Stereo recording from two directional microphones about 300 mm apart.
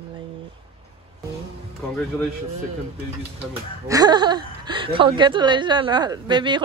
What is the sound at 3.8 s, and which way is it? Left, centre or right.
A woman's voice, centre.